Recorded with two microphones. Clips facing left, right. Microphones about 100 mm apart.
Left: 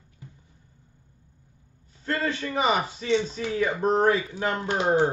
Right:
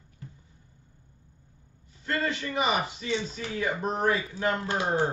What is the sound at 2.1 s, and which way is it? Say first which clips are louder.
Speech: left 2 dB; 35° left (ahead or behind).